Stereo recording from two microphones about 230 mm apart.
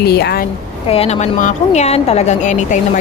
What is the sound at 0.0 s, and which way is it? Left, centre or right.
Speech, left.